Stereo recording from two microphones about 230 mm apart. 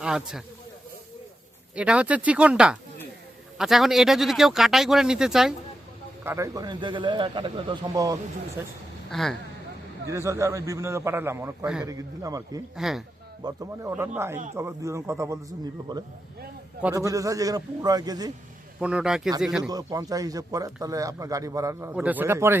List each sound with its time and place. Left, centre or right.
0.0 s speech: centre
1.7 s speech: centre
6.2 s a man's voice: centre
9.0 s speech: centre
10.1 s a man's voice: centre
11.9 s a man's voice: centre
12.7 s speech: centre
13.4 s a man's voice: centre
18.8 s speech: centre
19.6 s a man's voice: centre